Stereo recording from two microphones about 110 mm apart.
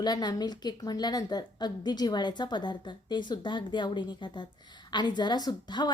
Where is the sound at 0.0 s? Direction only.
40° left (ahead or behind).